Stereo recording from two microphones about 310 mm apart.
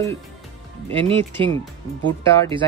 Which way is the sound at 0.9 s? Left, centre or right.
Centre.